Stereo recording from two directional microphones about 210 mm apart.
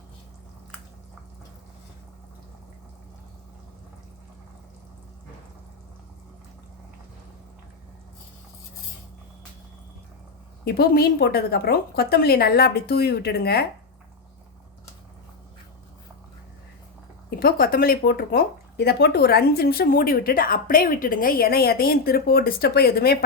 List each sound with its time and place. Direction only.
10.7 s speech: 45° left (ahead or behind)
17.2 s speech: 45° left (ahead or behind)